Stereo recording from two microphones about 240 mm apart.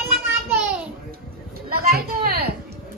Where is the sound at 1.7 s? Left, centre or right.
Right.